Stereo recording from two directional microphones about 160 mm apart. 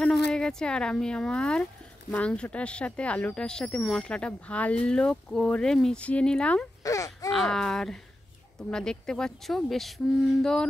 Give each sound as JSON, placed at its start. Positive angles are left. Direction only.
{"t": 0.3, "sound": "speech", "side_deg": 5}
{"t": 6.8, "sound": "a sound", "side_deg": 20}
{"t": 7.2, "sound": "speech", "side_deg": 0}